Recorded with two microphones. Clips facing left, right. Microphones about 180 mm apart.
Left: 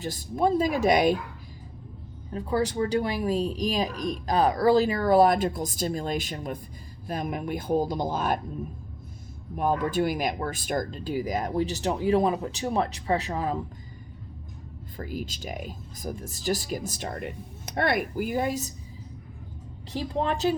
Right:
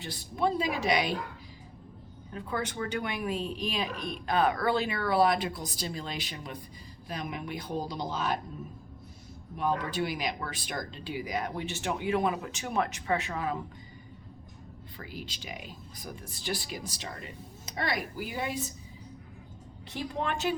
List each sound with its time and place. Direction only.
0.0 s speech: 45° left (ahead or behind)
2.3 s speech: 35° left (ahead or behind); by 8.4 s 50° left (ahead or behind)
9.6 s speech: 45° left (ahead or behind)
14.9 s speech: 45° left (ahead or behind)
19.9 s speech: 35° left (ahead or behind)